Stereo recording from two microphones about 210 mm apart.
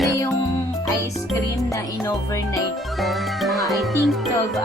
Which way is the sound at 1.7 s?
15° left (ahead or behind).